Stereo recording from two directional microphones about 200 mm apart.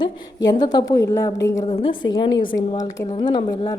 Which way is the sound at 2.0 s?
75° left (ahead or behind).